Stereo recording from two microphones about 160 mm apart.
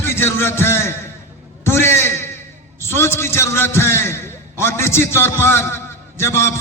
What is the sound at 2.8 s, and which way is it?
A man's voice, 15° left (ahead or behind).